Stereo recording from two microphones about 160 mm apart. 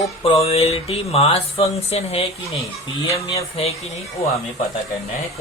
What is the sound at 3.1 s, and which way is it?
Speech, 20° left (ahead or behind).